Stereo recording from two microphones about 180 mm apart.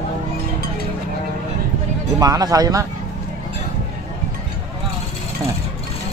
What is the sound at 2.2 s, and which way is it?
Speech, 20° right (ahead or behind).